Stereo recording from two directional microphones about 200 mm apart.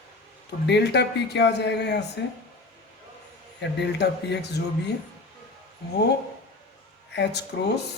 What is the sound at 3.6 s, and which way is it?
Speech, 60° left (ahead or behind).